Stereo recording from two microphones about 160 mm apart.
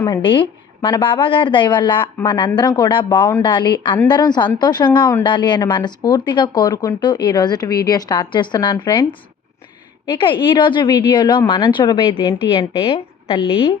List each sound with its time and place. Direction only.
0.2 s a woman's voice: 30° left (ahead or behind)
10.1 s a woman's voice: 30° left (ahead or behind)